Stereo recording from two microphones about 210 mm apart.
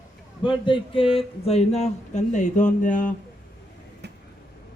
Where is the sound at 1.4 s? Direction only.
30° left (ahead or behind).